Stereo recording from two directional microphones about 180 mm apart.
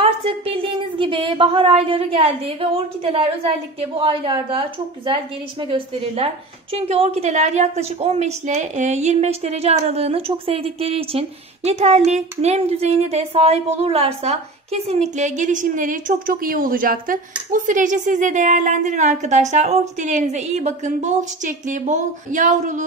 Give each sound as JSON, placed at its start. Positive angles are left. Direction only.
{"t": 0.0, "sound": "a woman's voice", "side_deg": -30}